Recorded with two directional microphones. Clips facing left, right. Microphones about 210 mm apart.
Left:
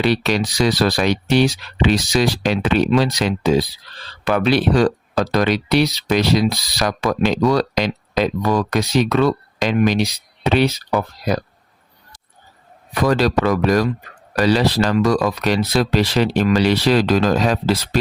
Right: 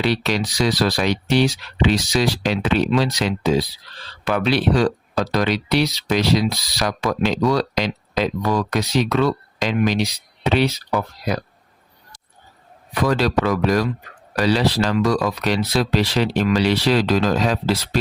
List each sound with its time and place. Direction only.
0.0 s speech: 55° left (ahead or behind)
12.9 s speech: 45° left (ahead or behind)